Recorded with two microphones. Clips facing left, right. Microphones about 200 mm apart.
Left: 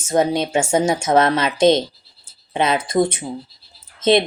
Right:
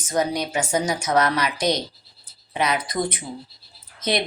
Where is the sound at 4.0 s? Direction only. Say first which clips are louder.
Left 9 dB; 25° left (ahead or behind).